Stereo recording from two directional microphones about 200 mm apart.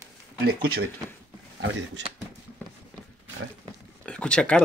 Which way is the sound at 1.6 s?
60° right (ahead or behind).